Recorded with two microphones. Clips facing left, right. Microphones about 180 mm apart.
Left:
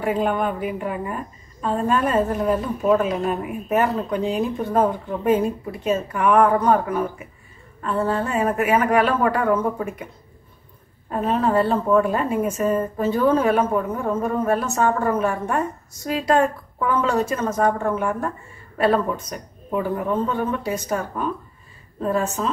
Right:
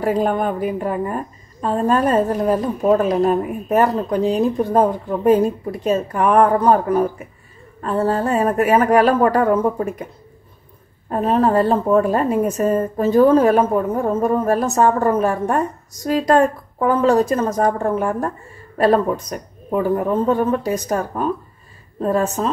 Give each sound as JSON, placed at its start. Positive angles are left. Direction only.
{"t": 0.0, "sound": "a woman's voice", "side_deg": -40}
{"t": 11.1, "sound": "a woman's voice", "side_deg": -40}